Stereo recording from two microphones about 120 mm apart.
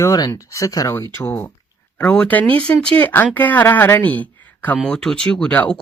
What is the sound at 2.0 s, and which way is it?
Speech, 10° left (ahead or behind).